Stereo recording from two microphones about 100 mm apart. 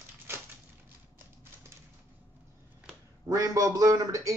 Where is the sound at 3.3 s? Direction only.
35° right (ahead or behind).